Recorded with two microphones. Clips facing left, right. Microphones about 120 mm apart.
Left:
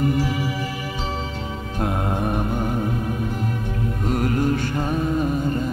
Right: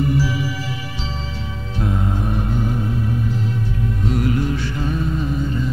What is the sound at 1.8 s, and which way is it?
Music, 55° left (ahead or behind).